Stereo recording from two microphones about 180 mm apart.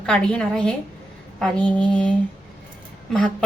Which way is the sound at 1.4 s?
5° left (ahead or behind).